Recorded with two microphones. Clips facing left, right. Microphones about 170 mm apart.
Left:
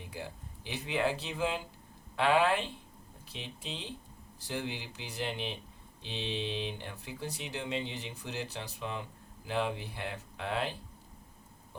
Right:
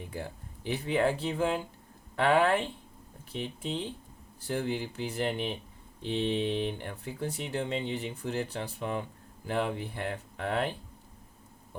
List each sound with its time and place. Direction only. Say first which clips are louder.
0.1 s speech: right 3 dB; 50° right (ahead or behind)